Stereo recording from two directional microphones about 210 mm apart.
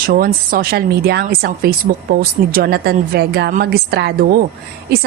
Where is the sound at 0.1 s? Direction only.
45° right (ahead or behind).